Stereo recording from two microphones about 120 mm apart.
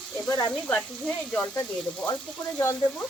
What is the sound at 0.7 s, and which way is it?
Speech, 10° left (ahead or behind).